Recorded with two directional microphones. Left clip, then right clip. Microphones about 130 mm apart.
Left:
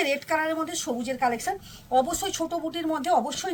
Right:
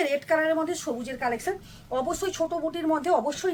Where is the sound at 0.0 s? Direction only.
25° right (ahead or behind).